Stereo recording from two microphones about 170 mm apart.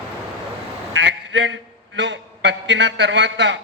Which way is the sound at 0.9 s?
90° right.